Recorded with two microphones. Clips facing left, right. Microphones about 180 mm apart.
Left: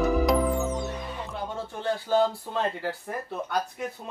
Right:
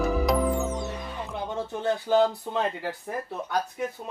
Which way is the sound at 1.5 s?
20° right (ahead or behind).